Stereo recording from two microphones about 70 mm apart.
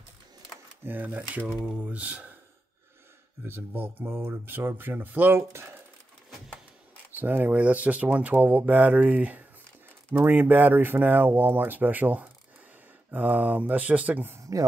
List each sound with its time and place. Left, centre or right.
0.8 s speech: right
3.4 s speech: right
5.5 s speech: right
7.2 s speech: right
14.4 s speech: right